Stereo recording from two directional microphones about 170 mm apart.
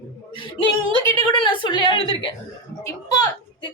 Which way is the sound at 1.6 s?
30° left (ahead or behind).